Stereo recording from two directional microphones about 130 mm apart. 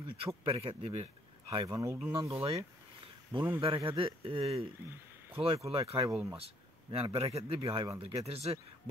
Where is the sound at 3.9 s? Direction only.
45° right (ahead or behind).